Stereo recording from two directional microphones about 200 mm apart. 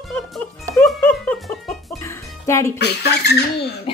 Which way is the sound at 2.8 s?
55° left (ahead or behind).